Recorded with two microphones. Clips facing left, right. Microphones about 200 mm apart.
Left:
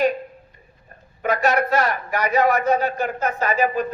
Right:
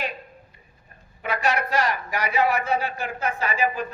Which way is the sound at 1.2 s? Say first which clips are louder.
Left 5 dB; 40° left (ahead or behind).